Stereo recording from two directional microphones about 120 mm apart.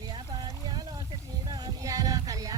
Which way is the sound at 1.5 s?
30° right (ahead or behind).